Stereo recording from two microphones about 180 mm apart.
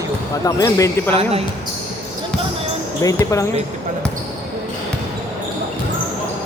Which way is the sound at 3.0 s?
20° left (ahead or behind).